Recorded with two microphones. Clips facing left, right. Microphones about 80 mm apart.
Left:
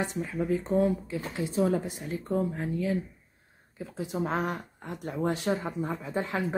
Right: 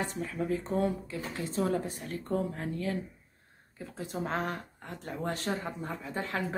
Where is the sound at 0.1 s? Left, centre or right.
Centre.